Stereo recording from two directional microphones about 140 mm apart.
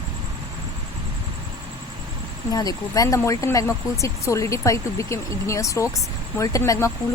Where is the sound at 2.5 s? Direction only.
25° left (ahead or behind).